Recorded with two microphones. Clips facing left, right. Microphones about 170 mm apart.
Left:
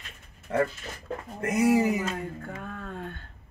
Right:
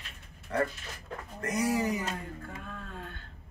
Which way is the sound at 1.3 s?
25° left (ahead or behind).